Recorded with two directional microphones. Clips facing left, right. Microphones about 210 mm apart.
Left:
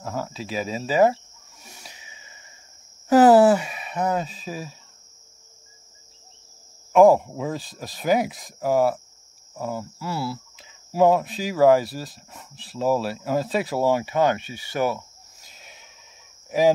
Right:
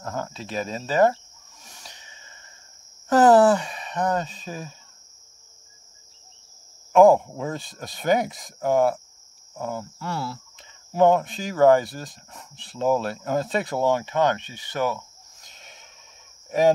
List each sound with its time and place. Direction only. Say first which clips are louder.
0.0 s cricket: left 1 dB; 5° left (ahead or behind)
3.1 s a sound: left 2 dB; 10° left (ahead or behind)
6.9 s speech: even; centre (ahead or behind)